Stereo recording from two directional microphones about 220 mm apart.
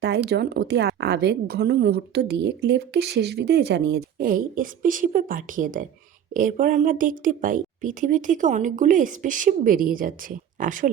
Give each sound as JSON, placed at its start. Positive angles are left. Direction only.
{"t": 0.0, "sound": "a woman's voice", "side_deg": -50}